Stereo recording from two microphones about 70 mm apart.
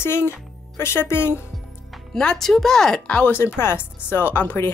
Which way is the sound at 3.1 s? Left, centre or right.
Left.